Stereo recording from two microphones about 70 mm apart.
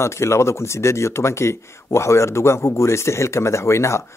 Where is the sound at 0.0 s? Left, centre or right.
Left.